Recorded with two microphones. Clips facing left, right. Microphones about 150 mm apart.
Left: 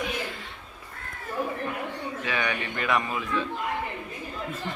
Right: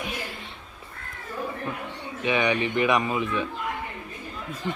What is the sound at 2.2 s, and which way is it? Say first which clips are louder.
Speech: right 8 dB; 20° right (ahead or behind).